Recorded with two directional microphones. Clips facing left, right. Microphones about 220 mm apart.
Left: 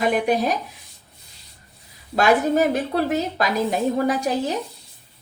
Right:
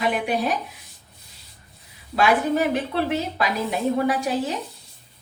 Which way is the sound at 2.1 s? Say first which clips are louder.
Left 2 dB; 40° left (ahead or behind).